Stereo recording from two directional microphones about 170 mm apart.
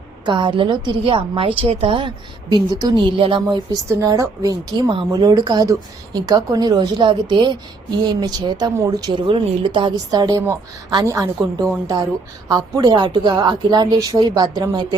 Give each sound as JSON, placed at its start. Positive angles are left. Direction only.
{"t": 0.3, "sound": "a woman's voice", "side_deg": -30}
{"t": 12.5, "sound": "a woman's voice", "side_deg": -25}